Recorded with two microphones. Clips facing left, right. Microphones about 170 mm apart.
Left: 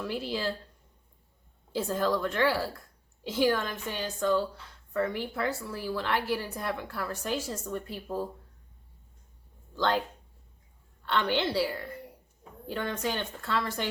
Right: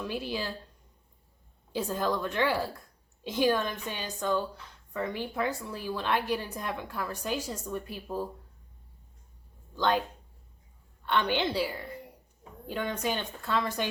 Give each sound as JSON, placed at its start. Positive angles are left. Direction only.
{"t": 0.0, "sound": "a woman's voice", "side_deg": -15}
{"t": 1.7, "sound": "a woman's voice", "side_deg": -15}
{"t": 9.7, "sound": "a woman's voice", "side_deg": -15}
{"t": 11.0, "sound": "a woman's voice", "side_deg": -15}